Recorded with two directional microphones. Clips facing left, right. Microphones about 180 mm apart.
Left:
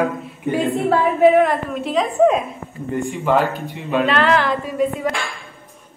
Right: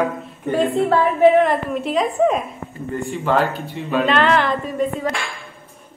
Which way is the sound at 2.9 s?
15° left (ahead or behind).